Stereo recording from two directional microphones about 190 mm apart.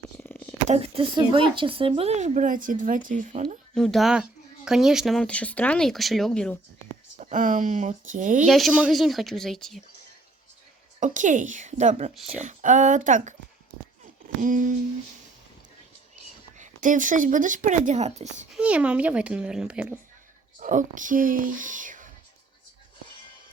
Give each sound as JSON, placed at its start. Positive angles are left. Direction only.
{"t": 0.2, "sound": "a sound", "side_deg": 10}
{"t": 0.7, "sound": "speech", "side_deg": -30}
{"t": 3.8, "sound": "speech", "side_deg": 0}
{"t": 7.2, "sound": "speech", "side_deg": -40}
{"t": 8.4, "sound": "speech", "side_deg": 0}
{"t": 11.0, "sound": "speech", "side_deg": -40}
{"t": 14.4, "sound": "speech", "side_deg": -45}
{"t": 16.6, "sound": "speech", "side_deg": -45}
{"t": 18.5, "sound": "speech", "side_deg": -5}
{"t": 20.6, "sound": "speech", "side_deg": -45}